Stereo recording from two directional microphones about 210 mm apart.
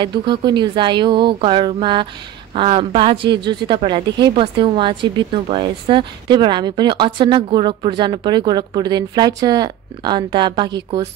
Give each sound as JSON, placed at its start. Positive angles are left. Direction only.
{"t": 0.0, "sound": "speech", "side_deg": -20}